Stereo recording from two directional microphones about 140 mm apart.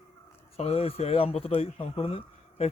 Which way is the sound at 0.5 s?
45° left (ahead or behind).